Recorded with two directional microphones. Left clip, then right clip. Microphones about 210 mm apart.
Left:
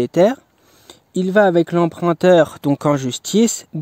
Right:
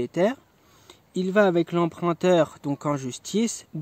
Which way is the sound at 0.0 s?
45° left (ahead or behind).